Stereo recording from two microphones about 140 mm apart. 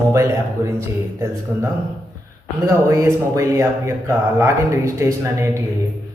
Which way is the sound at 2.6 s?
20° right (ahead or behind).